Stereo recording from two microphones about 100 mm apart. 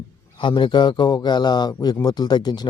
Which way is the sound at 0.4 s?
50° left (ahead or behind).